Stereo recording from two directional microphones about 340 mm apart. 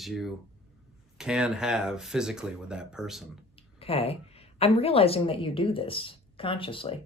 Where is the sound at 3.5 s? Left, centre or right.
Centre.